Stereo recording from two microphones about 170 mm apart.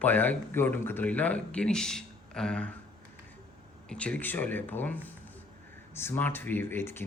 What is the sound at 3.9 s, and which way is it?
Speech, 5° left (ahead or behind).